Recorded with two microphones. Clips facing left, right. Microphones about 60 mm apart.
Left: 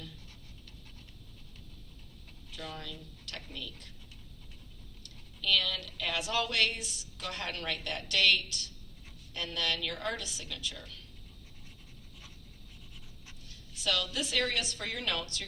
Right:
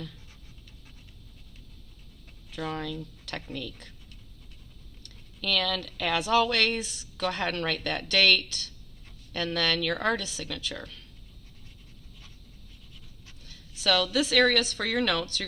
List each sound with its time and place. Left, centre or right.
2.6 s speech: right
2.9 s speech: right
5.5 s a woman's voice: right
6.3 s speech: right
6.6 s speech: right
7.2 s speech: right
9.3 s a woman's voice: right
13.8 s a woman's voice: right
14.6 s a woman's voice: right